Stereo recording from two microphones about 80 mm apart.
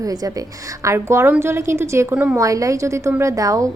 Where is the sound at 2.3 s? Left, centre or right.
Right.